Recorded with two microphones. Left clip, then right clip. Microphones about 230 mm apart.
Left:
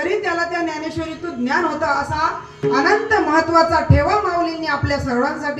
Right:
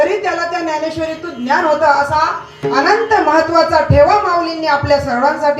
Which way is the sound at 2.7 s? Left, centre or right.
Left.